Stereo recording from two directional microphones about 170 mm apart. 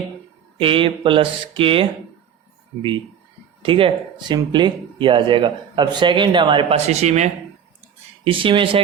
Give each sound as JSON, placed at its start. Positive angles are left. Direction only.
{"t": 0.6, "sound": "speech", "side_deg": -30}
{"t": 3.6, "sound": "speech", "side_deg": -30}